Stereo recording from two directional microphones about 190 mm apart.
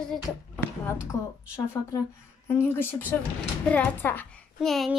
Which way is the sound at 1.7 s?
15° left (ahead or behind).